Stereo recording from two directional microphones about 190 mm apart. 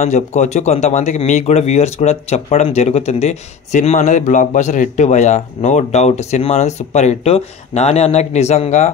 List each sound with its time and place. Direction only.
0.0 s speech: 40° left (ahead or behind)